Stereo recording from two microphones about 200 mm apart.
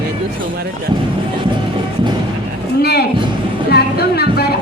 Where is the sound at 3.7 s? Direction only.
50° left (ahead or behind).